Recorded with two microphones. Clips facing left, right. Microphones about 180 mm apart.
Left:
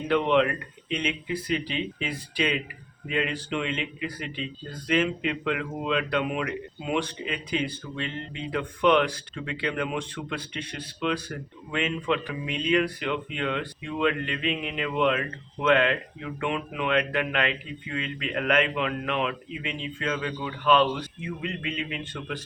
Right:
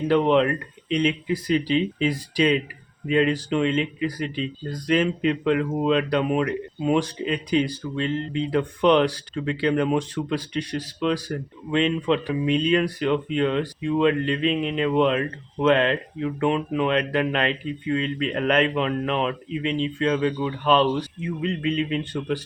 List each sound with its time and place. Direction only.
0.1 s speech: 35° right (ahead or behind)